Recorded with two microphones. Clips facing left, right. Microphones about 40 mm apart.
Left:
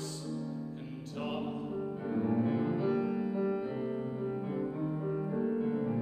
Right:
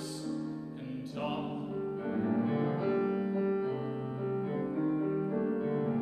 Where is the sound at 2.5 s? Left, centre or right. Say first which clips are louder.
Even; right.